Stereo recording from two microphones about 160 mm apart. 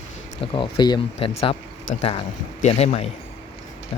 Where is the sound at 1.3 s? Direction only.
40° left (ahead or behind).